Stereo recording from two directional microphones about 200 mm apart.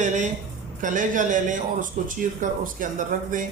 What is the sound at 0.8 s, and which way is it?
A man's voice, 40° right (ahead or behind).